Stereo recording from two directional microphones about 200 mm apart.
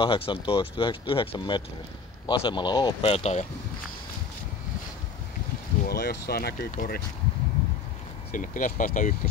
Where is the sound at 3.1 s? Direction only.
30° left (ahead or behind).